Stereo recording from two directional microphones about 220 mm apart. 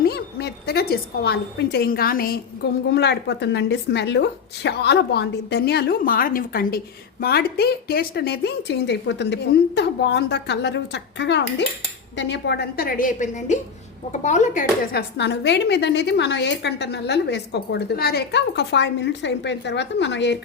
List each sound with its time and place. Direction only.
0.0 s a woman's voice: 45° left (ahead or behind)